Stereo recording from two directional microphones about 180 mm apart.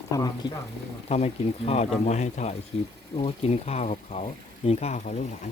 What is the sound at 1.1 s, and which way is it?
Speech, 35° left (ahead or behind).